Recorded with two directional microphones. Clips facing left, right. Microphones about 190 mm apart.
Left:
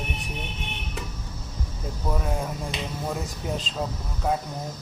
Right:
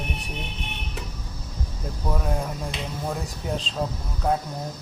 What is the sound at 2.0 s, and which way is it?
Speech, centre (ahead or behind).